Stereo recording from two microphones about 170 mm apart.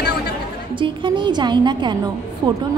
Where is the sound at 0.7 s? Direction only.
30° right (ahead or behind).